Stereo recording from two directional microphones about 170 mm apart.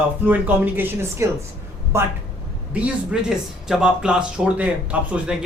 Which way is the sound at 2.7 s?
5° right (ahead or behind).